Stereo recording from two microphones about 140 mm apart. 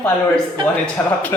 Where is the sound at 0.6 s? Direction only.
35° right (ahead or behind).